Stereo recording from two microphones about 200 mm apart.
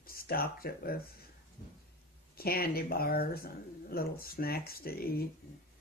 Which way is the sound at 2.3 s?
50° left (ahead or behind).